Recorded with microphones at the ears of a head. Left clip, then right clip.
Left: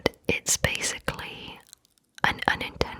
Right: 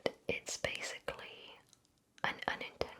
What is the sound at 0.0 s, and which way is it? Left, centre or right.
Whispering, left.